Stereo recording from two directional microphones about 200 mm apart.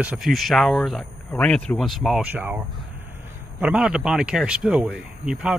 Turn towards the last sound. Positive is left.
turn(degrees=-5)  # may be behind; listen again after turning